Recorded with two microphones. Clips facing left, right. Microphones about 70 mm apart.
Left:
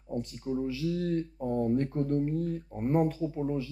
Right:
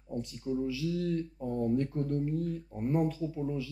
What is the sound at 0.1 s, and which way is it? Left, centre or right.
Speech, left.